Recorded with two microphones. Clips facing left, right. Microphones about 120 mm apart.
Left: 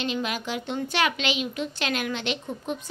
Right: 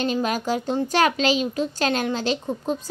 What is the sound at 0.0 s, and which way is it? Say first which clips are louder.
A woman's voice: right 5 dB; 40° right (ahead or behind).